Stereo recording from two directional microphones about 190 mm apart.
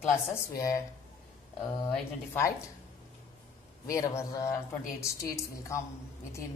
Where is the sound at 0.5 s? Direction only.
15° left (ahead or behind).